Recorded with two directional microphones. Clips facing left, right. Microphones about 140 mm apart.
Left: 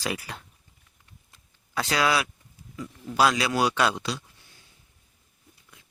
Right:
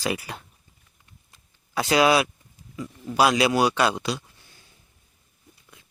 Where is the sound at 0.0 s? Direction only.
5° right (ahead or behind).